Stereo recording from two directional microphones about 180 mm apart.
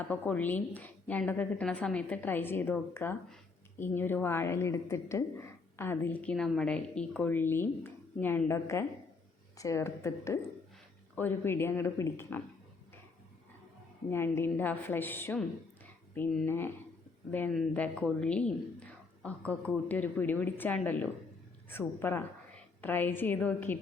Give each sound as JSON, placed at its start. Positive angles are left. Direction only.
{"t": 0.0, "sound": "a woman's voice", "side_deg": 10}
{"t": 14.1, "sound": "a woman's voice", "side_deg": 15}